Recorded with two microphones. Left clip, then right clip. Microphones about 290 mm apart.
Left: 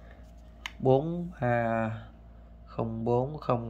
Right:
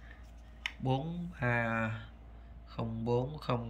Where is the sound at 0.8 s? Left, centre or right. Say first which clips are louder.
Left 13 dB; centre.